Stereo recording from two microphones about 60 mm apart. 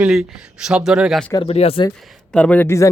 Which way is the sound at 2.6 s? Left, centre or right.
Left.